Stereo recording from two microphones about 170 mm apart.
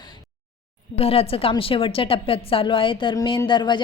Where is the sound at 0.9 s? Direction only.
35° left (ahead or behind).